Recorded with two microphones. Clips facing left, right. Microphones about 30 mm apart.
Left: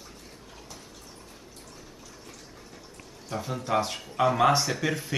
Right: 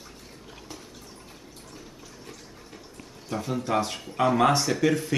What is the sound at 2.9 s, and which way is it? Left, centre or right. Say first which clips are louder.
Speech: right 2 dB; centre.